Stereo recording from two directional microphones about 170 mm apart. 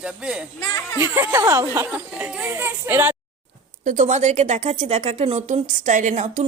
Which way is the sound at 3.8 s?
45° right (ahead or behind).